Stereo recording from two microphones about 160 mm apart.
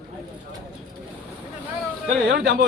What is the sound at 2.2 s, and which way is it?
Speech, 90° right.